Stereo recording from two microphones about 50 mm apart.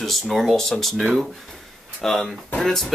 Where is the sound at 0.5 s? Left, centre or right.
Centre.